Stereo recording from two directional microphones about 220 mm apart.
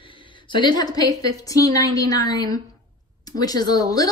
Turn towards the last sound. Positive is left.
turn(degrees=15)  # may be behind; listen again after turning